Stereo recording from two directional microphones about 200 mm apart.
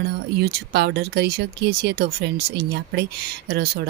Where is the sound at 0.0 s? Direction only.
55° right (ahead or behind).